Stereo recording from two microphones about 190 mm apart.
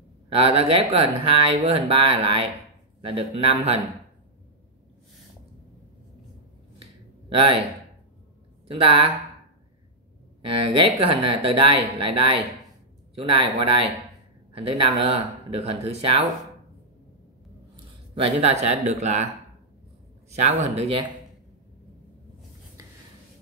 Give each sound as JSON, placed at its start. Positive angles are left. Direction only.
{"t": 0.3, "sound": "speech", "side_deg": -30}
{"t": 8.6, "sound": "speech", "side_deg": -30}
{"t": 10.4, "sound": "speech", "side_deg": -30}
{"t": 18.1, "sound": "speech", "side_deg": -30}
{"t": 20.2, "sound": "speech", "side_deg": -35}